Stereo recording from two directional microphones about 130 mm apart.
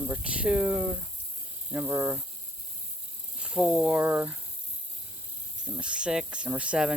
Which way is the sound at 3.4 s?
5° right (ahead or behind).